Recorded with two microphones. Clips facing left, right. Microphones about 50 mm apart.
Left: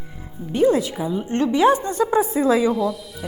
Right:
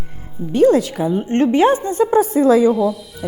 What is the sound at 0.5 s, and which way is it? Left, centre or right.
Speech, right.